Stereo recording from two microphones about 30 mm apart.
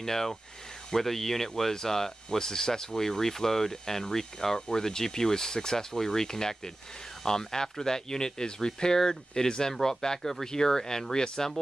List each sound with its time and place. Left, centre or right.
0.0 s speech: centre